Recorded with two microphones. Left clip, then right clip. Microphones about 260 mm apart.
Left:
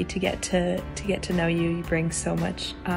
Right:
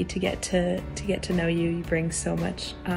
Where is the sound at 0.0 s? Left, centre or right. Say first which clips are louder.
Left 1 dB; centre.